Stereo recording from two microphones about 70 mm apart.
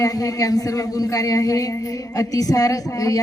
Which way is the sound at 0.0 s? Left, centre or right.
Left.